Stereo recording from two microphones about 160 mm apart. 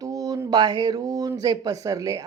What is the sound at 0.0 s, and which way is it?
Speech, 25° right (ahead or behind).